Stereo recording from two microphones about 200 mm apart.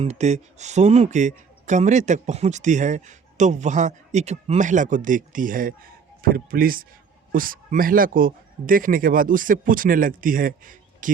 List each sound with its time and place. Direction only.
0.0 s speech: 35° right (ahead or behind)